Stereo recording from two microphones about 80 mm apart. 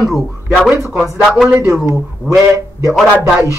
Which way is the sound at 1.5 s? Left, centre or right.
Right.